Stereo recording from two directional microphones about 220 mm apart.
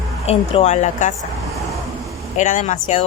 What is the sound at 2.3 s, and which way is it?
Speech, 35° left (ahead or behind).